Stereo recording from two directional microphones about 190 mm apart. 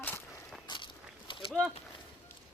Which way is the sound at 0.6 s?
25° left (ahead or behind).